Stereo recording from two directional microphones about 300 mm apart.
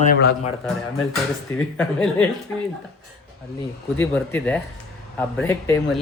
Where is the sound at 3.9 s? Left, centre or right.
Centre.